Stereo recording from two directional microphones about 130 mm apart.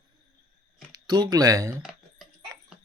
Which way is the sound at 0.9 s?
35° right (ahead or behind).